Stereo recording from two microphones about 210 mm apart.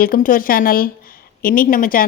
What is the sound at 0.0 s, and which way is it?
Speech, 40° left (ahead or behind).